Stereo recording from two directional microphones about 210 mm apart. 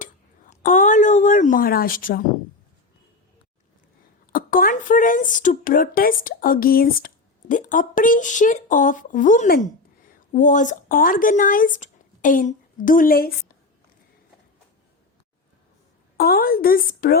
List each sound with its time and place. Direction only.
0.0 s a sound: 40° left (ahead or behind)
4.3 s speech: 40° left (ahead or behind)
16.1 s a woman's voice: 45° left (ahead or behind)